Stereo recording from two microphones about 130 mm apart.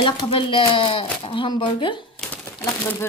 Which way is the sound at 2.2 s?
10° left (ahead or behind).